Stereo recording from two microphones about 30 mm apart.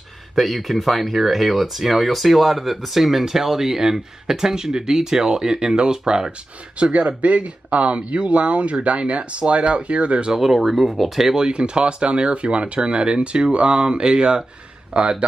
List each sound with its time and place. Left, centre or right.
0.4 s speech: centre; by 6.3 s right
6.8 s speech: right
10.3 s speech: centre
11.3 s speech: right